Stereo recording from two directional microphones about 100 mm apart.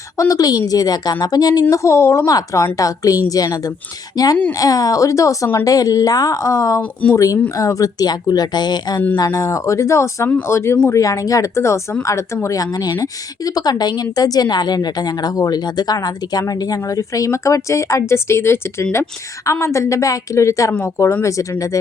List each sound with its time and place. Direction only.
0.2 s speech: 35° left (ahead or behind)
1.7 s speech: 30° left (ahead or behind)
11.0 s speech: 35° left (ahead or behind)